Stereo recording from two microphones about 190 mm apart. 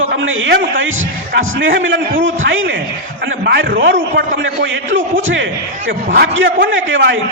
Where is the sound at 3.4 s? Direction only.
65° right (ahead or behind); by 5.4 s 85° right.